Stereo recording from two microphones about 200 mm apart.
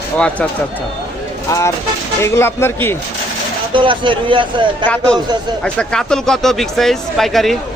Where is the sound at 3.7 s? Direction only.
25° right (ahead or behind).